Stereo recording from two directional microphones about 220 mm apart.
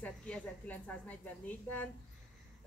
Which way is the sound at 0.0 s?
5° left (ahead or behind).